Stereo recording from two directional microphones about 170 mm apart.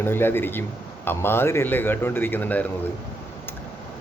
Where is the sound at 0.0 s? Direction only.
15° left (ahead or behind).